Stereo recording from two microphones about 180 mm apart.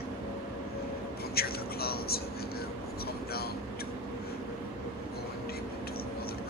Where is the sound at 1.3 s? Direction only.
60° left (ahead or behind).